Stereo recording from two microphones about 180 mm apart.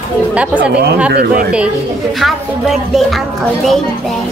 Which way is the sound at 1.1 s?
60° right (ahead or behind).